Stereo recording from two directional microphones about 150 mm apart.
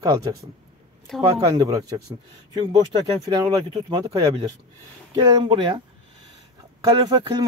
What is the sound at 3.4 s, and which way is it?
Speech, 30° right (ahead or behind).